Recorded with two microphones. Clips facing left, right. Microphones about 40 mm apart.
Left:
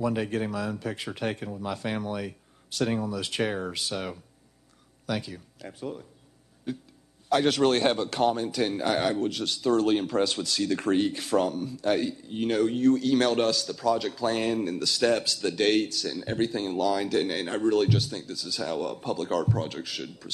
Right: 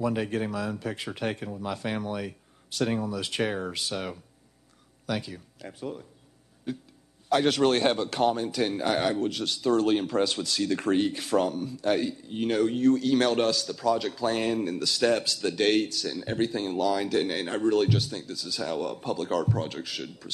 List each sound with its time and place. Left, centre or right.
0.0 s a man's voice: centre
7.2 s a man's voice: centre